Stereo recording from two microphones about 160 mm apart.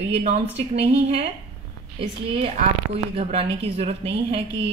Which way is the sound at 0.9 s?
40° right (ahead or behind).